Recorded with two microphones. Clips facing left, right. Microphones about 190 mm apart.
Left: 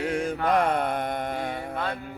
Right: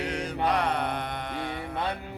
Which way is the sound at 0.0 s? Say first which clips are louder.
Left 3 dB; 50° left (ahead or behind).